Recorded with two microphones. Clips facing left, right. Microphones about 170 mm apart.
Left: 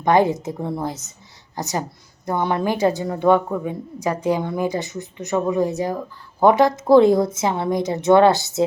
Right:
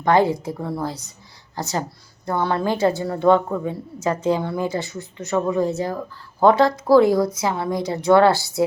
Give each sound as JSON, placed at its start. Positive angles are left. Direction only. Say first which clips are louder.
{"t": 0.0, "sound": "a woman's voice", "louder": "left 1 dB", "side_deg": 20}